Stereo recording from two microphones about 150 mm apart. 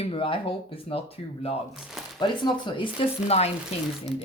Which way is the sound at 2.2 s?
30° left (ahead or behind).